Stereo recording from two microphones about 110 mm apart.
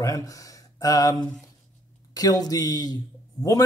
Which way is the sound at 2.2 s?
35° left (ahead or behind).